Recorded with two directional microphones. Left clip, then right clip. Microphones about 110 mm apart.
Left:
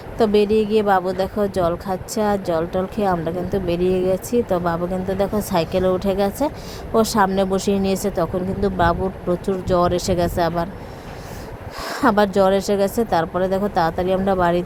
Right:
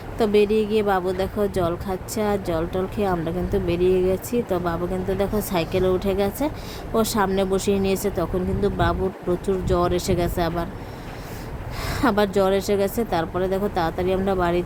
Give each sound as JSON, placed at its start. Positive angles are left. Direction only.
{"t": 0.2, "sound": "speech", "side_deg": 20}
{"t": 11.8, "sound": "speech", "side_deg": 25}